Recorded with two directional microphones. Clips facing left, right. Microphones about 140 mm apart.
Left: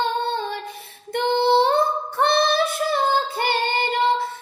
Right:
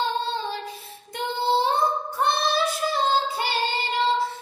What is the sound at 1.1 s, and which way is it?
Child singing, 65° left (ahead or behind).